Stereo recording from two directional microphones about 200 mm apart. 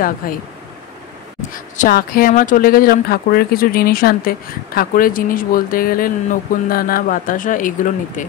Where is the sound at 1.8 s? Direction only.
50° left (ahead or behind).